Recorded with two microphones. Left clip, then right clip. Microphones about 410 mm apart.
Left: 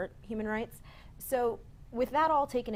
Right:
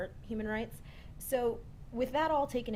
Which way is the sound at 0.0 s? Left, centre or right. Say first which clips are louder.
Left 2 dB; left.